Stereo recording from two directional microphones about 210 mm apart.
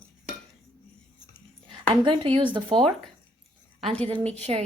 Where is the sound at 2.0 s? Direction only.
25° right (ahead or behind).